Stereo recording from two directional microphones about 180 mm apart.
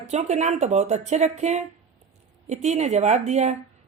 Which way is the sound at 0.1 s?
40° right (ahead or behind).